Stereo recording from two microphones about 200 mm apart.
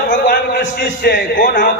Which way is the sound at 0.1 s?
45° left (ahead or behind).